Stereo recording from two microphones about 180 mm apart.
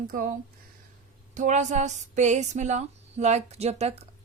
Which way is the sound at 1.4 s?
40° right (ahead or behind).